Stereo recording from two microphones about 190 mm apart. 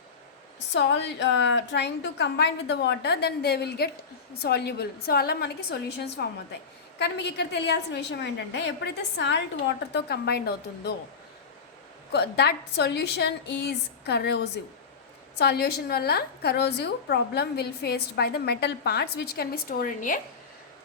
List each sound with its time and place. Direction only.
0.7 s a woman's voice: 65° left (ahead or behind)
12.1 s a woman's voice: 60° left (ahead or behind); by 20.1 s 45° left (ahead or behind)